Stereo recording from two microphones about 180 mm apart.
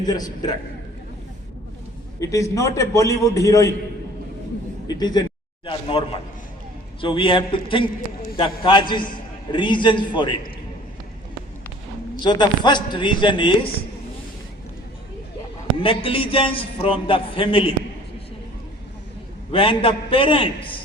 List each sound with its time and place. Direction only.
0.0 s a man's voice: 20° left (ahead or behind)
2.2 s a man's voice: 20° left (ahead or behind)
4.9 s a man's voice: 20° left (ahead or behind)
12.2 s a man's voice: 25° left (ahead or behind)
15.8 s a man's voice: 30° left (ahead or behind)
19.5 s a man's voice: 30° left (ahead or behind)